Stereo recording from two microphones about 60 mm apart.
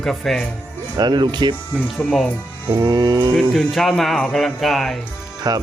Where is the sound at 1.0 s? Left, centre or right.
Right.